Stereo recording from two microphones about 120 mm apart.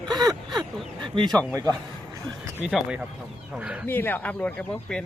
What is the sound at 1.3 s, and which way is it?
Speech, 10° left (ahead or behind).